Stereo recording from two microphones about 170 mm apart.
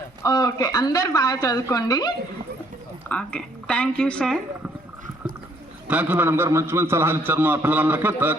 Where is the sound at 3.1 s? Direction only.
5° left (ahead or behind).